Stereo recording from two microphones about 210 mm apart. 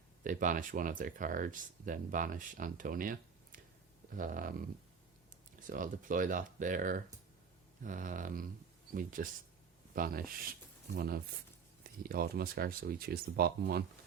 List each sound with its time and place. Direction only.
0.3 s speech: 40° right (ahead or behind)
5.6 s speech: 40° right (ahead or behind)